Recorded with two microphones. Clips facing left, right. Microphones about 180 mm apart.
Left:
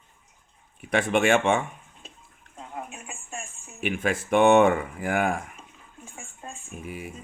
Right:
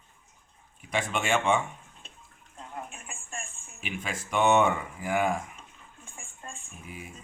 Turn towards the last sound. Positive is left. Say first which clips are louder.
# left 10 dB
turn(degrees=55)  # may be behind; listen again after turning